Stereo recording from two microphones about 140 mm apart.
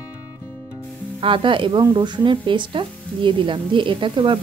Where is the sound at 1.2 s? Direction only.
35° right (ahead or behind).